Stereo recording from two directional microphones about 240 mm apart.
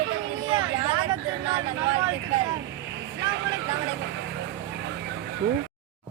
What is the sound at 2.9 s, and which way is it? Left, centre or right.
Vehicle, right.